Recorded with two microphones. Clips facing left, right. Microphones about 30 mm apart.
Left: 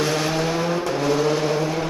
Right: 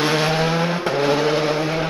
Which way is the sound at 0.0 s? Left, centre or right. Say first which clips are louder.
Right 3 dB; right.